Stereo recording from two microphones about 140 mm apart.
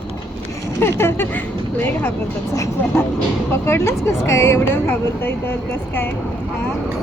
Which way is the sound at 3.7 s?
20° left (ahead or behind).